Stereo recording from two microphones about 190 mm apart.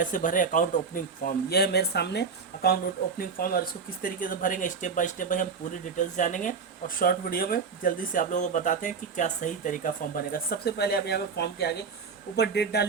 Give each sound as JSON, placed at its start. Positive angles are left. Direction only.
{"t": 0.0, "sound": "speech", "side_deg": 45}